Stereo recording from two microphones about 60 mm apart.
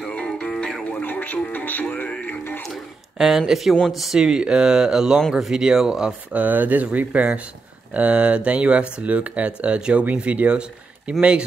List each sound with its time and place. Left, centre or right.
0.4 s music: centre
1.0 s music: left
3.2 s speech: centre
6.4 s speech: right